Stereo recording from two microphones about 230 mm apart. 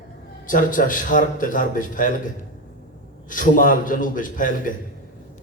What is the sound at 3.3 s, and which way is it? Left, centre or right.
A man's voice, left.